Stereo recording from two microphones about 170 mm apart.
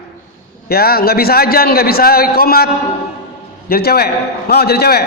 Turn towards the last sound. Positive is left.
turn(degrees=70)  # may be behind; listen again after turning